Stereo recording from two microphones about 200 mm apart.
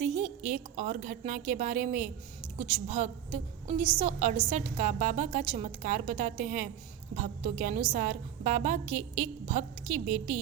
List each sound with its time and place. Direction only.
0.0 s a woman's voice: 35° right (ahead or behind)